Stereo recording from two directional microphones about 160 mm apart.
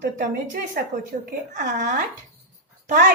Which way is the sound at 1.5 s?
55° right (ahead or behind).